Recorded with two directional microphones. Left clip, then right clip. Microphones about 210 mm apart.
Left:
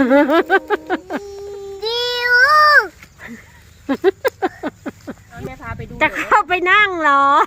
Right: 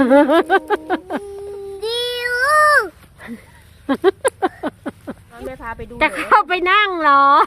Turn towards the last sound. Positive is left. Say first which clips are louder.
# right 1 dB
turn(degrees=0)  # may be behind; listen again after turning